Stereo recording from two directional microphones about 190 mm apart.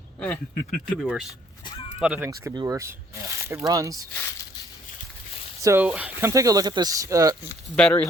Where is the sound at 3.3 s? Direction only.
15° right (ahead or behind).